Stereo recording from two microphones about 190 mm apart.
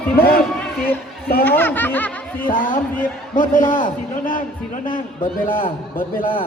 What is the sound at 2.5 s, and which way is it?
A man's voice, 45° left (ahead or behind).